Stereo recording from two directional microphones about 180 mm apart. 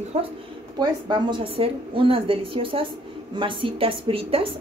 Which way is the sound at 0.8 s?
25° right (ahead or behind).